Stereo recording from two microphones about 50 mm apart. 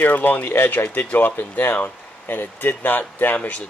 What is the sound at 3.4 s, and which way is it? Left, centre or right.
Speech, left.